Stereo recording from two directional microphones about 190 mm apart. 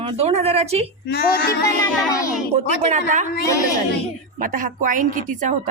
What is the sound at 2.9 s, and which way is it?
Speech, 40° right (ahead or behind).